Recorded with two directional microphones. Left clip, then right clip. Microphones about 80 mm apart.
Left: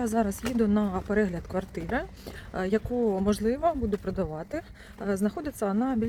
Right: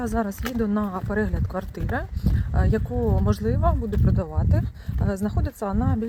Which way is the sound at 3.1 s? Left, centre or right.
Left.